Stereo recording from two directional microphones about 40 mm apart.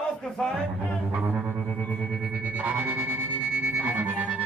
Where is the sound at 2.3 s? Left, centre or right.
Right.